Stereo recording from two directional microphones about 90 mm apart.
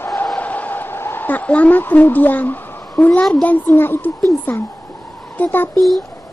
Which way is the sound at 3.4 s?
20° left (ahead or behind).